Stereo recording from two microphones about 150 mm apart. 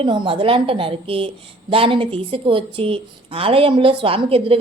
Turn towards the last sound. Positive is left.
turn(degrees=-40)  # may be behind; listen again after turning